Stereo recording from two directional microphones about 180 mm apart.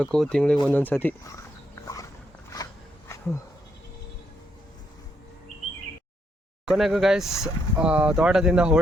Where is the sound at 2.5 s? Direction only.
20° left (ahead or behind).